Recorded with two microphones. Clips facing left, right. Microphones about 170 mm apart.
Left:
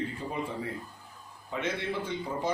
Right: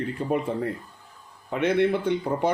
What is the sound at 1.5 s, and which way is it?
Speech, 60° right (ahead or behind).